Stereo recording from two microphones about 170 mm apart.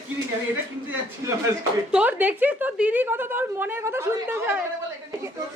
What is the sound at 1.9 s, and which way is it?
A woman's voice, 10° right (ahead or behind).